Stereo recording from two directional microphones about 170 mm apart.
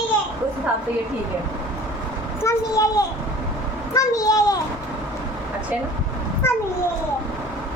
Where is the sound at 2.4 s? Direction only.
20° left (ahead or behind).